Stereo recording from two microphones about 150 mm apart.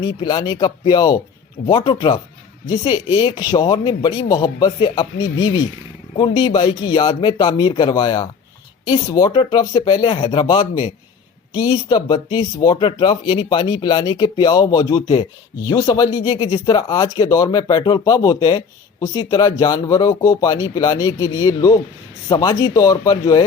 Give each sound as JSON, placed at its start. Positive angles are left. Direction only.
{"t": 0.0, "sound": "speech", "side_deg": 30}